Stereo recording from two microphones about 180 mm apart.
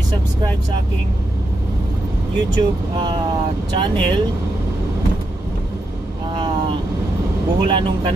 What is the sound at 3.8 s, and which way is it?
Speech, 25° right (ahead or behind).